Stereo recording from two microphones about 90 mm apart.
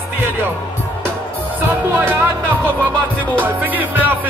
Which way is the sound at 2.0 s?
25° right (ahead or behind).